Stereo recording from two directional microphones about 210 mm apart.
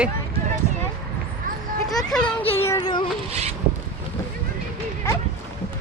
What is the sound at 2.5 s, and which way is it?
Music, 15° left (ahead or behind).